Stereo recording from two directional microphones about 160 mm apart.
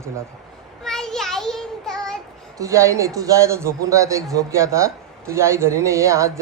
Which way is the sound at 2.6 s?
20° right (ahead or behind).